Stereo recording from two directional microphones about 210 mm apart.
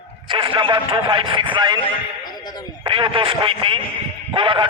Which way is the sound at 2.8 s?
25° right (ahead or behind).